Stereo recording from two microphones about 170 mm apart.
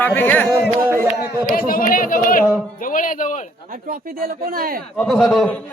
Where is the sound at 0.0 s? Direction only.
10° left (ahead or behind).